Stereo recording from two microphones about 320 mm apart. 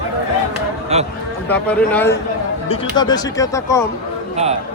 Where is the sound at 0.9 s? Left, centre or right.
Centre.